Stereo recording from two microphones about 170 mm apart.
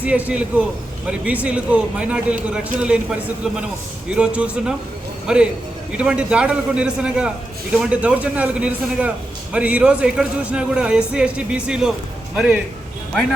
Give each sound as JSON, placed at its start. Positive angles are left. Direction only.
{"t": 0.0, "sound": "a man's voice", "side_deg": -10}